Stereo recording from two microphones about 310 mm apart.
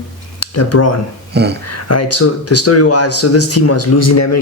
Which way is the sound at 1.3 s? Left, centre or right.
Right.